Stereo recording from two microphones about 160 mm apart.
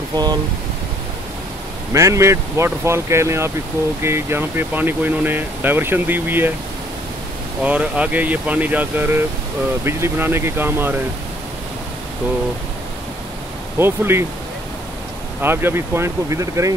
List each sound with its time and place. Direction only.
0.1 s speech: 25° right (ahead or behind)
2.0 s speech: 20° right (ahead or behind)
7.6 s speech: 10° right (ahead or behind)
13.7 s speech: 15° right (ahead or behind)
15.4 s speech: 15° right (ahead or behind)